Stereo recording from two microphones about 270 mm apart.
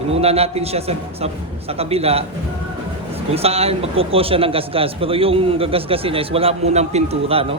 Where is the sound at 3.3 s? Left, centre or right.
Right.